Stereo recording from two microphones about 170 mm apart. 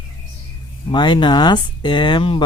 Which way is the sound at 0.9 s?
25° left (ahead or behind).